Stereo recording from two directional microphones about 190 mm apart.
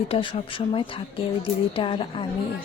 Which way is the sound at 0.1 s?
25° left (ahead or behind).